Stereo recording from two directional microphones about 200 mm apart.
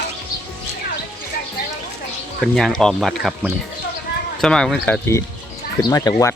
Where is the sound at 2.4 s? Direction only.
Centre (ahead or behind).